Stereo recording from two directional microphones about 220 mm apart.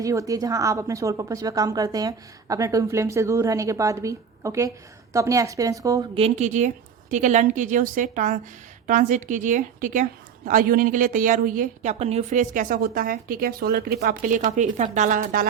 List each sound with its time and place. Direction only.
0.0 s a woman's voice: 15° right (ahead or behind)
6.1 s a woman's voice: 30° right (ahead or behind)